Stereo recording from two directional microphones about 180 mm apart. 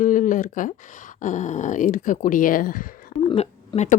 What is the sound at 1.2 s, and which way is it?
Speech, 45° left (ahead or behind).